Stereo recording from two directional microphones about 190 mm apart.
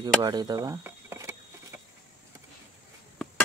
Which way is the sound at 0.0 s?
20° right (ahead or behind).